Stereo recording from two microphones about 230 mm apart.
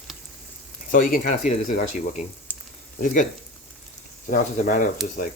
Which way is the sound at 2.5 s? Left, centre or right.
Centre.